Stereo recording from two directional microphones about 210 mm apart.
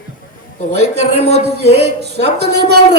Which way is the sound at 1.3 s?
55° right (ahead or behind).